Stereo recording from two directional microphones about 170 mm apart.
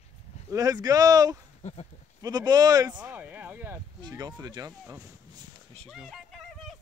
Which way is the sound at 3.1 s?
10° right (ahead or behind).